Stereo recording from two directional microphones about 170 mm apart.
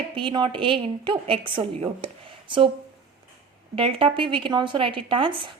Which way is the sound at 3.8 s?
30° right (ahead or behind).